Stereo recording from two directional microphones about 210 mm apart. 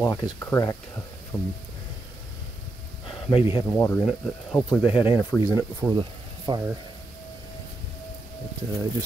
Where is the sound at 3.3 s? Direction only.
25° left (ahead or behind).